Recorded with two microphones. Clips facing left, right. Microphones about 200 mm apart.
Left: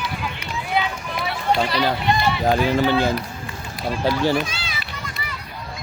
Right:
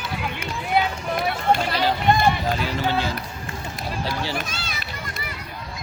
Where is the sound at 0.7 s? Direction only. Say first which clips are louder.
Right 2 dB; 50° right (ahead or behind).